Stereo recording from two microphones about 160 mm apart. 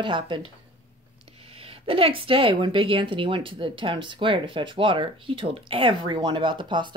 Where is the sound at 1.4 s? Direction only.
35° right (ahead or behind).